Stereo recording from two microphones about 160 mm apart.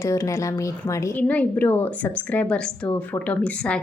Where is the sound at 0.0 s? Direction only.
15° left (ahead or behind).